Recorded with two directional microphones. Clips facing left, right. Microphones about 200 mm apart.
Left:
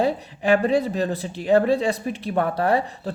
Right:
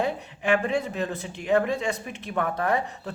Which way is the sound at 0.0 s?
35° left (ahead or behind).